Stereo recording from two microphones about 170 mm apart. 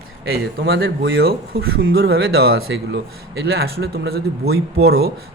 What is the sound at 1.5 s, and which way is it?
Speech, 65° right (ahead or behind).